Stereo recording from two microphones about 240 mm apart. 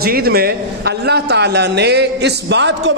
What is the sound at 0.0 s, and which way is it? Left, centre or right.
A man's voice, right.